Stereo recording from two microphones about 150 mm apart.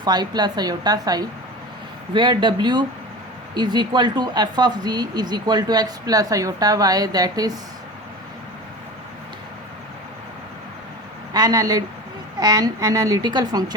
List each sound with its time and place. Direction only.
0.0 s speech: 30° right (ahead or behind)
11.3 s speech: 25° right (ahead or behind)